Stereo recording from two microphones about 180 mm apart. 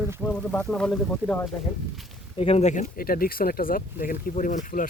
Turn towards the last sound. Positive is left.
turn(degrees=45)  # may be behind; listen again after turning